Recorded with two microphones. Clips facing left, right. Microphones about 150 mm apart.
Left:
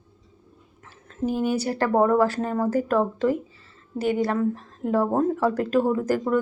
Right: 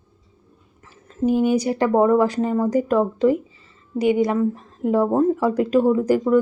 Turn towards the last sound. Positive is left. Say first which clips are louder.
# right 5 dB
turn(degrees=-10)  # may be behind; listen again after turning